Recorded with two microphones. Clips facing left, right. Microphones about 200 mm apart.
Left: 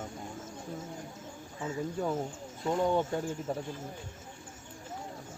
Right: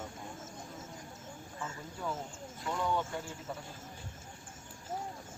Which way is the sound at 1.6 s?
30° left (ahead or behind).